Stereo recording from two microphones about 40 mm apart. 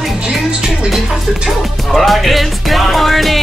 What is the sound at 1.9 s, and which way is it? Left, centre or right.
Speech, centre.